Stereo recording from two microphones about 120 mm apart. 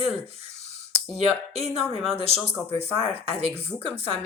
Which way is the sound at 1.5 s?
60° right (ahead or behind).